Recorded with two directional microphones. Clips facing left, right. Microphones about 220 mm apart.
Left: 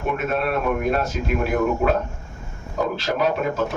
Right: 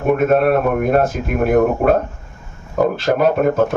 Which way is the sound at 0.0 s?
50° right (ahead or behind).